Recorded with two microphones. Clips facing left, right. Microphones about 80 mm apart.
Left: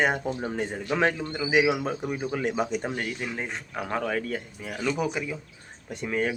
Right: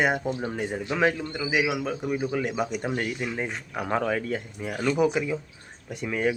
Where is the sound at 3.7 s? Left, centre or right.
Centre.